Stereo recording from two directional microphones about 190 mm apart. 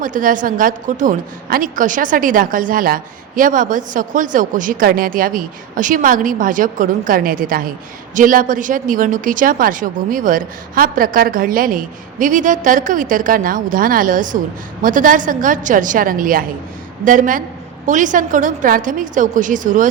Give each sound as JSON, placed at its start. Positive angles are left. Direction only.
{"t": 0.0, "sound": "a woman's voice", "side_deg": -45}